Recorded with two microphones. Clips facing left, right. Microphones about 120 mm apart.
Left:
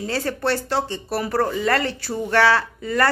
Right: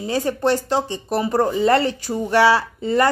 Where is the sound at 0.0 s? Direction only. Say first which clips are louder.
Right 4 dB; 15° right (ahead or behind).